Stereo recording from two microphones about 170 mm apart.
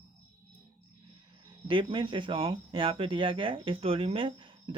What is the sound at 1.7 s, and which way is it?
Speech, 30° right (ahead or behind).